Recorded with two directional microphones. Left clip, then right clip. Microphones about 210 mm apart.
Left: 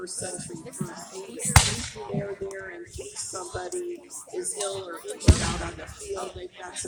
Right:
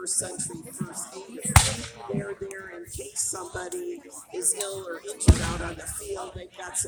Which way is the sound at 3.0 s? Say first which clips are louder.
Right 3 dB; 55° right (ahead or behind).